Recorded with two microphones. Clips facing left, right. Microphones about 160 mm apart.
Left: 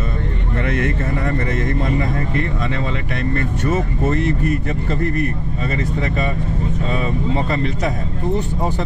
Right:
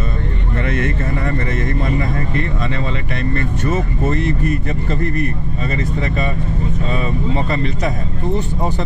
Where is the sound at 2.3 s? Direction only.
10° left (ahead or behind).